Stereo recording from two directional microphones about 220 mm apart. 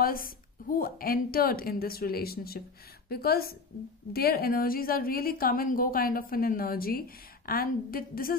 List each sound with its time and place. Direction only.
0.0 s a woman's voice: 40° left (ahead or behind)